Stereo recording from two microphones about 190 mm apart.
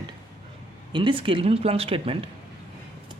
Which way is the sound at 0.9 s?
25° right (ahead or behind).